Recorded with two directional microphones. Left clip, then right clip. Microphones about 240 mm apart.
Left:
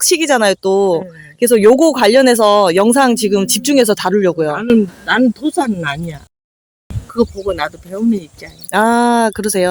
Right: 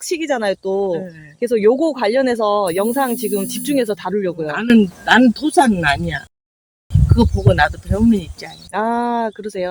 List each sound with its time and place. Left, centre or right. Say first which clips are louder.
0.0 s speech: left 7 dB; left
4.5 s speech: left 2 dB; centre
8.7 s speech: left 7 dB; left